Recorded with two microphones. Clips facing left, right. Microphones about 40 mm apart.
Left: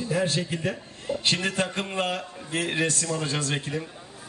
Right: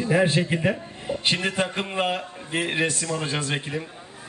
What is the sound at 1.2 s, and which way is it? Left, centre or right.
A man's voice, centre.